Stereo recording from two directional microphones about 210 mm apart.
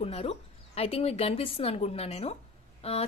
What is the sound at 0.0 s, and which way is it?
A woman's voice, 30° left (ahead or behind).